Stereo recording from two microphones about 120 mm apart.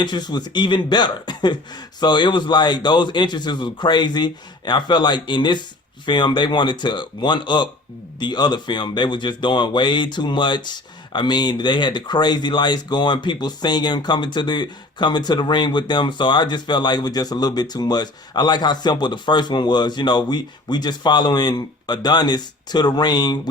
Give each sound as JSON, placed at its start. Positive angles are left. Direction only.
{"t": 0.0, "sound": "speech", "side_deg": 35}